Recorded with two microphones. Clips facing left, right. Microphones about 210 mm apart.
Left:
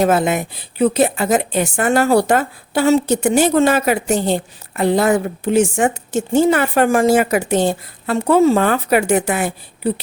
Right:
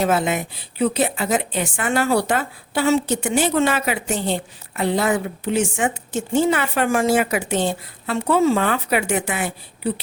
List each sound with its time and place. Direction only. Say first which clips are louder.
0.0 s a woman's voice: left 4 dB; 45° left (ahead or behind)